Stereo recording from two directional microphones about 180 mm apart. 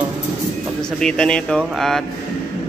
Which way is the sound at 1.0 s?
5° left (ahead or behind).